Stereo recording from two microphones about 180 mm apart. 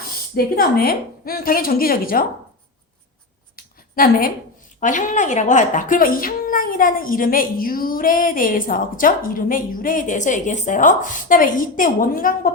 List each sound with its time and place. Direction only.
0.3 s a woman's voice: 60° left (ahead or behind)
3.5 s a sound: 50° left (ahead or behind)
4.8 s a woman's voice: 45° left (ahead or behind)